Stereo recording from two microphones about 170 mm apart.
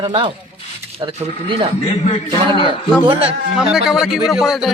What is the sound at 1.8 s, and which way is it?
Speech, 40° left (ahead or behind).